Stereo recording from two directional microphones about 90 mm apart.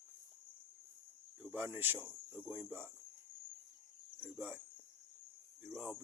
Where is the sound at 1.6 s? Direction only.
20° right (ahead or behind).